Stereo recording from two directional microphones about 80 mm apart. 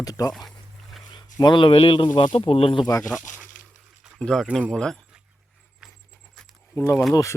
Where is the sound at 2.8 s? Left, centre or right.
Left.